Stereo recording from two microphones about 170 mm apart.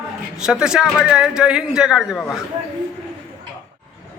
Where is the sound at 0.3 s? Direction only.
5° right (ahead or behind).